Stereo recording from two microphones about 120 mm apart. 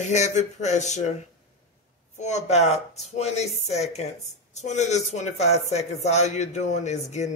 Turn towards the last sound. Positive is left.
turn(degrees=75)  # may be behind; listen again after turning